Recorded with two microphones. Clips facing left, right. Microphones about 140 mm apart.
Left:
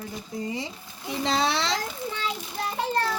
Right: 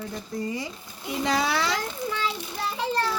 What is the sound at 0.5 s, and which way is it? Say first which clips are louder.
A child's voice: even; 25° left (ahead or behind).